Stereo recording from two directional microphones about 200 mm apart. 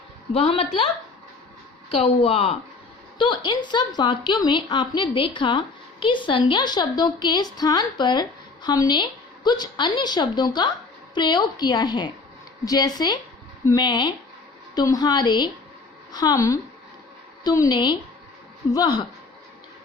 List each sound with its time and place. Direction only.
0.3 s a woman's voice: 30° left (ahead or behind)
1.9 s a woman's voice: 30° left (ahead or behind)